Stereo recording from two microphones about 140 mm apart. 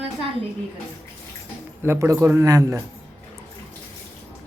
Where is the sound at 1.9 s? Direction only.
20° right (ahead or behind).